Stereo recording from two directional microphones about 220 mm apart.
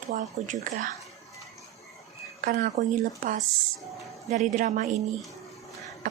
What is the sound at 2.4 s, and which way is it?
A woman's voice, 40° right (ahead or behind).